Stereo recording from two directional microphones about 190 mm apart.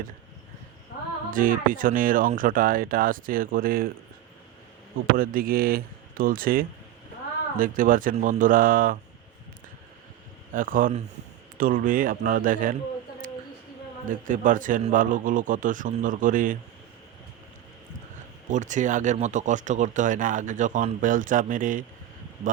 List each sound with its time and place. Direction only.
1.3 s speech: 45° right (ahead or behind)
5.1 s speech: 50° right (ahead or behind)
10.5 s speech: 45° right (ahead or behind)
14.1 s speech: 45° right (ahead or behind)
18.5 s speech: 40° right (ahead or behind)